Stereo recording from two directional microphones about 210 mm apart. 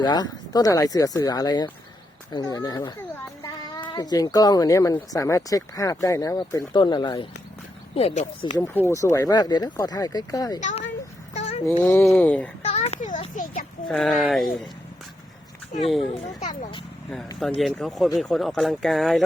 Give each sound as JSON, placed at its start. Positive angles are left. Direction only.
{"t": 0.0, "sound": "speech", "side_deg": 20}
{"t": 8.5, "sound": "speech", "side_deg": 15}
{"t": 10.6, "sound": "a child's voice", "side_deg": 35}
{"t": 11.3, "sound": "a sound", "side_deg": 30}
{"t": 11.8, "sound": "speech", "side_deg": 10}
{"t": 12.6, "sound": "a child's voice", "side_deg": 30}
{"t": 13.8, "sound": "speech", "side_deg": 5}
{"t": 15.7, "sound": "speech", "side_deg": 35}
{"t": 17.6, "sound": "speech", "side_deg": 0}